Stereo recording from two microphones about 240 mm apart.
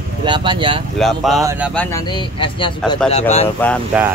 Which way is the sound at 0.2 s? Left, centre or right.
Centre.